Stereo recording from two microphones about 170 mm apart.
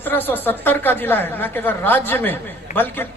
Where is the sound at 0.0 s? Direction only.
10° left (ahead or behind).